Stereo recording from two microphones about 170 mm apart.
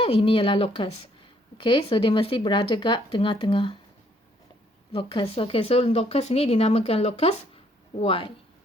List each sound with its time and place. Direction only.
0.0 s speech: 30° left (ahead or behind)
4.9 s speech: 30° left (ahead or behind)